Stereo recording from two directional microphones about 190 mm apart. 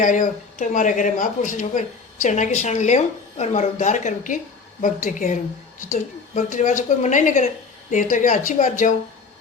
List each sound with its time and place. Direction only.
0.0 s speech: 45° left (ahead or behind)